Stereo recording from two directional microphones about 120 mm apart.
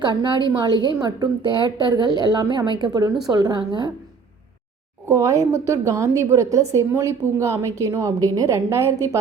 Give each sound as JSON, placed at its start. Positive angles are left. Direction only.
{"t": 0.0, "sound": "a woman's voice", "side_deg": -40}
{"t": 5.0, "sound": "a woman's voice", "side_deg": -25}